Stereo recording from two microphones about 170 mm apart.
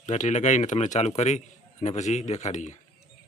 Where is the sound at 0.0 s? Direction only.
45° left (ahead or behind).